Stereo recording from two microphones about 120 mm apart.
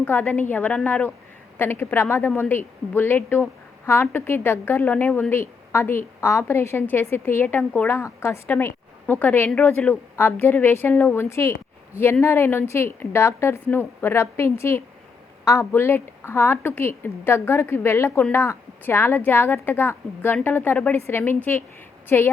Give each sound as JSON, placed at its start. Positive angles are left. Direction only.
{"t": 0.0, "sound": "a woman's voice", "side_deg": 15}